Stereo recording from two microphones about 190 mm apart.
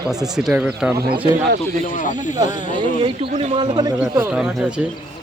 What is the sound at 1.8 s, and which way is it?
Speech, 40° left (ahead or behind).